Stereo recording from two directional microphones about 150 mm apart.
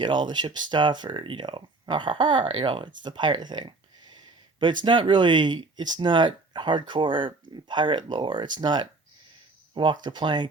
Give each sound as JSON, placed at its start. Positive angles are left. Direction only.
{"t": 0.0, "sound": "speech", "side_deg": -30}